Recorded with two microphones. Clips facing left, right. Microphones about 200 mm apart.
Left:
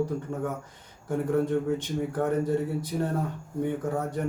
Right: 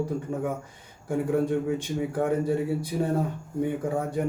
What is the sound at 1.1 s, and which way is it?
A man's voice, 10° right (ahead or behind).